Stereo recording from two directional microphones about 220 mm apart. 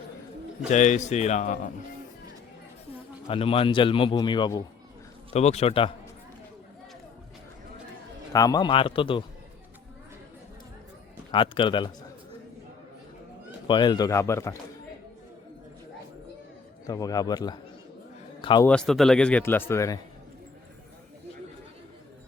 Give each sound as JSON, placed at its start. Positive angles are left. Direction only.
{"t": 0.7, "sound": "speech", "side_deg": 35}
{"t": 3.2, "sound": "a man's voice", "side_deg": 25}
{"t": 8.3, "sound": "a man's voice", "side_deg": 15}
{"t": 11.3, "sound": "a man's voice", "side_deg": 20}
{"t": 13.7, "sound": "speech", "side_deg": 20}
{"t": 16.8, "sound": "speech", "side_deg": 15}
{"t": 18.6, "sound": "speech", "side_deg": 5}